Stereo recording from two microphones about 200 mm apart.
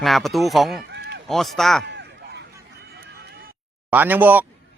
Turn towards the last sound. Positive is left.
turn(degrees=-10)  # may be behind; listen again after turning